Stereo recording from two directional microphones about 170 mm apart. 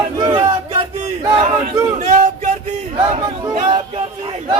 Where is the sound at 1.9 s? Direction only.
45° right (ahead or behind).